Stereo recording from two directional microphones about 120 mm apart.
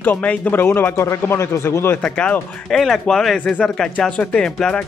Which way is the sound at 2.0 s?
10° left (ahead or behind).